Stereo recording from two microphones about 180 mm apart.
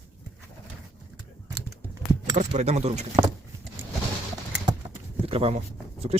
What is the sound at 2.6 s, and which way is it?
Speech, 40° right (ahead or behind).